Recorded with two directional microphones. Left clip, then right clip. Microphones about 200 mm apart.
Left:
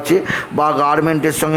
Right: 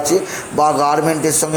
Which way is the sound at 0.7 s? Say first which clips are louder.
Even; 15° left (ahead or behind).